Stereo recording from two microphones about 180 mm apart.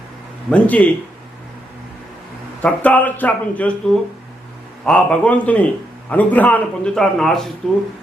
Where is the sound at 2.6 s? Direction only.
10° left (ahead or behind).